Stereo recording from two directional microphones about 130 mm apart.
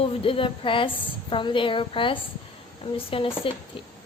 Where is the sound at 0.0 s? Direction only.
45° left (ahead or behind).